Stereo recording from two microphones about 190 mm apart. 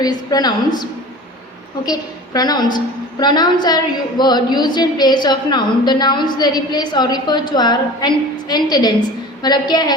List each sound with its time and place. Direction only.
0.0 s a woman's voice: 20° left (ahead or behind)
1.8 s a woman's voice: 20° left (ahead or behind)